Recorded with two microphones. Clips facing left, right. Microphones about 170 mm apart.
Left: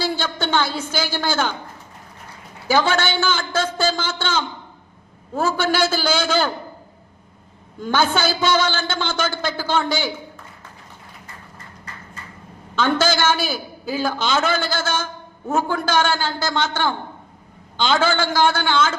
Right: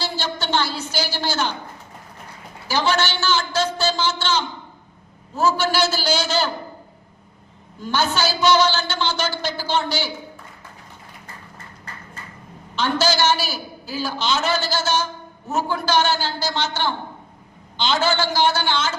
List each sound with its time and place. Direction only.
0.0 s a woman's voice: 50° left (ahead or behind)
2.6 s a man's voice: 50° left (ahead or behind)
7.8 s a man's voice: 50° left (ahead or behind)
12.7 s a man's voice: 50° left (ahead or behind)